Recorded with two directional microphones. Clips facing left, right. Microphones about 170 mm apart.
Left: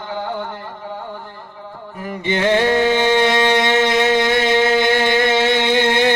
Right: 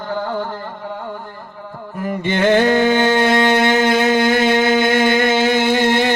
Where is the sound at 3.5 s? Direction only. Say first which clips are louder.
Right 1 dB; 5° right (ahead or behind).